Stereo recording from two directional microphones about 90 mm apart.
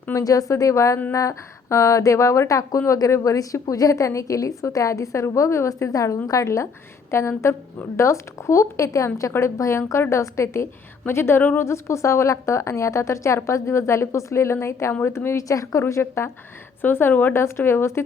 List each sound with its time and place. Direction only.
0.1 s a woman's voice: 40° left (ahead or behind)